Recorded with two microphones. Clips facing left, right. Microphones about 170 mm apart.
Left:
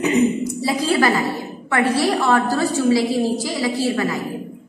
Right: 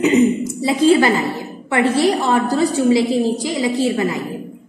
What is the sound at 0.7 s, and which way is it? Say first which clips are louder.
A woman's voice: right 6 dB; 25° right (ahead or behind).